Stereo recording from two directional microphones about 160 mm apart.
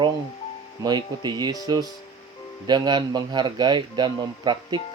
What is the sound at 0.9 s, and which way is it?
A man's voice, 25° right (ahead or behind).